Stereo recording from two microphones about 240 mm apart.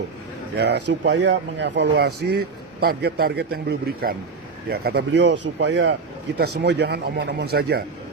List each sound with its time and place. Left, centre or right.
0.9 s speech: right